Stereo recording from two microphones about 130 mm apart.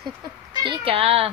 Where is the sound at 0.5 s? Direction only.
35° right (ahead or behind).